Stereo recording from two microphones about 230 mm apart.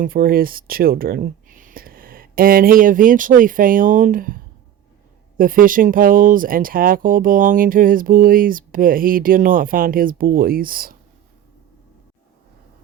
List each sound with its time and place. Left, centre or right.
0.0 s speech: right
5.4 s speech: right